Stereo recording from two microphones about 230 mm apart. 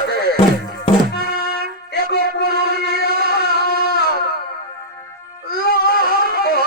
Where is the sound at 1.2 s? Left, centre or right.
Left.